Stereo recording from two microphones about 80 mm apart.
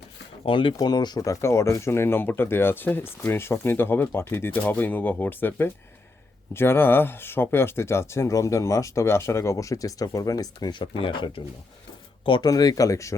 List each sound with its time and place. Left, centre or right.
0.5 s speech: left
0.8 s speech: left
1.2 s speech: left
10.8 s speech: left
12.5 s speech: left